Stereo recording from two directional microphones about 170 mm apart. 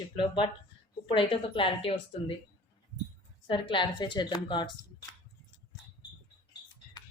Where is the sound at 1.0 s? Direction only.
30° left (ahead or behind).